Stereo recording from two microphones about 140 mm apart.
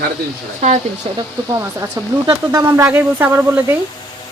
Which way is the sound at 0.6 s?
55° right (ahead or behind).